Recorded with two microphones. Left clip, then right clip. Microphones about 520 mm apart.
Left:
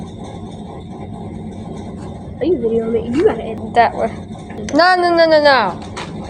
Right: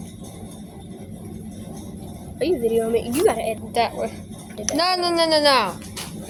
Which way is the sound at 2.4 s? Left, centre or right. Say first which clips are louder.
Left 4 dB; right.